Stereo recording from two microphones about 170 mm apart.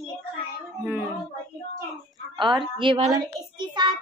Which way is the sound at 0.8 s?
10° right (ahead or behind).